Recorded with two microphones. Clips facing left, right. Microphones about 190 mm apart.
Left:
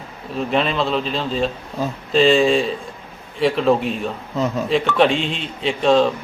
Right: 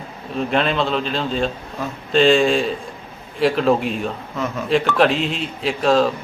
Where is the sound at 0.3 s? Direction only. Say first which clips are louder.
Even; centre (ahead or behind).